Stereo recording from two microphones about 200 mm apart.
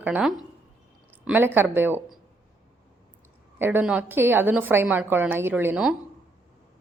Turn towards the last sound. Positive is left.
turn(degrees=-10)  # may be behind; listen again after turning